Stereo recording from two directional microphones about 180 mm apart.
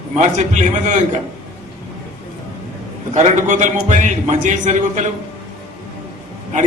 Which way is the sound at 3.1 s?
40° right (ahead or behind).